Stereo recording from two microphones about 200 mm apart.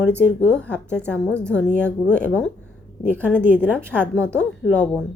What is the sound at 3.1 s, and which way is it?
Speech, 10° right (ahead or behind).